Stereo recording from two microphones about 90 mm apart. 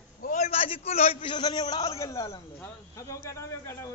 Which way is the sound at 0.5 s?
90° left.